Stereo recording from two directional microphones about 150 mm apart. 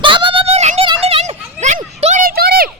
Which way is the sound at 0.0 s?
35° right (ahead or behind).